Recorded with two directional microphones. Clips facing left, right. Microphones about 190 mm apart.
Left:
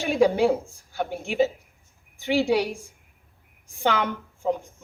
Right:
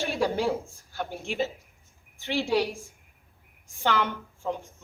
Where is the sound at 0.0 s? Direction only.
15° left (ahead or behind).